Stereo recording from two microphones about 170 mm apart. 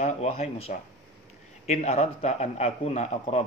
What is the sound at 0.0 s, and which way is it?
A man's voice, 40° left (ahead or behind).